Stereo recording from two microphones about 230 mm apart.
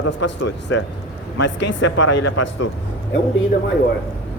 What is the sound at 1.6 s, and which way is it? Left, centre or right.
Speech, left.